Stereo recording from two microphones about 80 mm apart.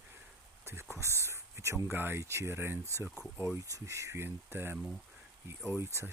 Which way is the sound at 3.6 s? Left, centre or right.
Right.